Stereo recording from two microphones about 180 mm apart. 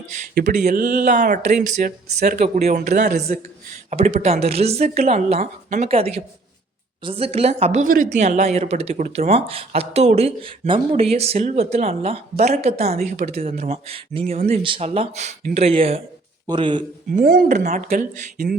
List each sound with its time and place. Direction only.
0.3 s speech: 45° right (ahead or behind)
3.2 s speech: 55° right (ahead or behind)
3.8 s a woman's voice: 40° right (ahead or behind)
17.1 s speech: 55° right (ahead or behind)
17.5 s a woman's voice: 40° right (ahead or behind)